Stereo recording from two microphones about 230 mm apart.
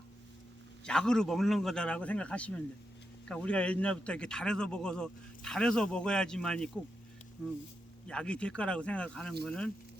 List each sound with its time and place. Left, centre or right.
0.9 s a man's voice: centre
8.0 s a man's voice: centre